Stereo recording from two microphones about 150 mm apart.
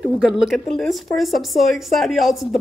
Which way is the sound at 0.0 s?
5° right (ahead or behind).